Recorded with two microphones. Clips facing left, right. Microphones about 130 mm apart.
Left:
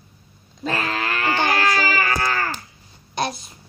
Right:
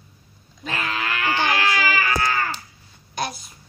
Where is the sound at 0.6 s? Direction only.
40° left (ahead or behind).